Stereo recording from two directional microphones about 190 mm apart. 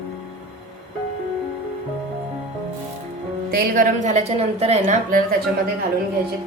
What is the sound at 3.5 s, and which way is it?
A woman's voice, 45° right (ahead or behind).